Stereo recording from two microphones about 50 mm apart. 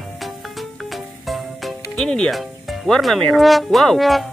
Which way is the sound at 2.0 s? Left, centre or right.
Centre.